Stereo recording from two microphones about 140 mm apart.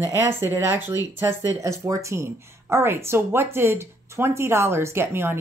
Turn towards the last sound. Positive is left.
turn(degrees=-15)  # may be behind; listen again after turning